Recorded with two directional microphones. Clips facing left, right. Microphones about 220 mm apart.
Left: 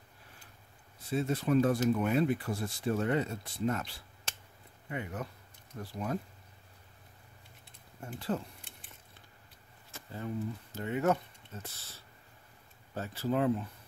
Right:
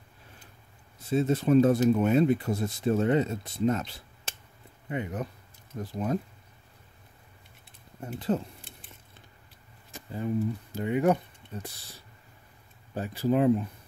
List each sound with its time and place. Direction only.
1.0 s speech: 25° right (ahead or behind)
8.0 s speech: 20° right (ahead or behind)
9.8 s speech: 15° right (ahead or behind)